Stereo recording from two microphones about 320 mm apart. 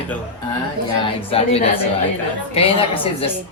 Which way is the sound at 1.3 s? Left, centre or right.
Centre.